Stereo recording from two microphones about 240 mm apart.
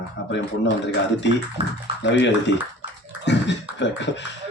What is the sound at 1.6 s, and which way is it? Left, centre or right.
Speech, right.